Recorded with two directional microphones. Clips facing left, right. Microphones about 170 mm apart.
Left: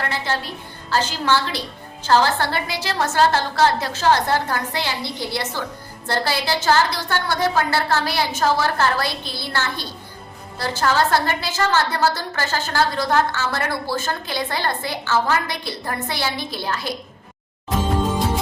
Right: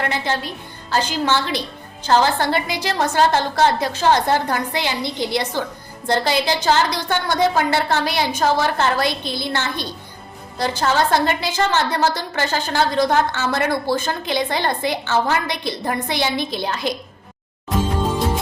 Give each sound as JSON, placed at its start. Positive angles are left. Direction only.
{"t": 0.0, "sound": "a woman's voice", "side_deg": -15}